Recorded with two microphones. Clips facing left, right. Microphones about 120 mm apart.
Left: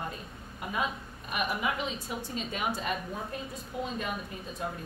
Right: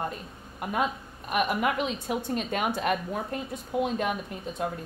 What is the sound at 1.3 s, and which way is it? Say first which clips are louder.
A woman's voice: right 6 dB; 60° right (ahead or behind).